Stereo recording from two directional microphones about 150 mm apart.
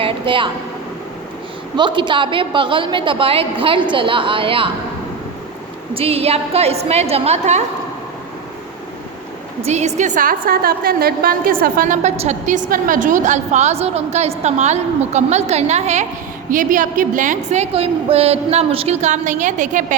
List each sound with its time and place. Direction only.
0.0 s a woman's voice: 35° right (ahead or behind)
1.7 s a woman's voice: 30° right (ahead or behind)
5.9 s a woman's voice: 40° right (ahead or behind)
9.6 s a woman's voice: 50° right (ahead or behind)
10.2 s a woman's voice: 70° right (ahead or behind)
11.6 s a woman's voice: 60° right (ahead or behind)
16.5 s a woman's voice: 60° right (ahead or behind)